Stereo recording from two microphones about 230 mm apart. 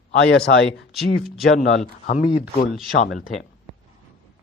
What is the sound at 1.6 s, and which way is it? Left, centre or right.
Speech, left.